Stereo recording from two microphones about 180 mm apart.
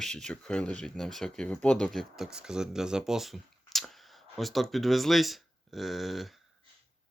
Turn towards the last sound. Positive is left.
turn(degrees=0)  # may be behind; listen again after turning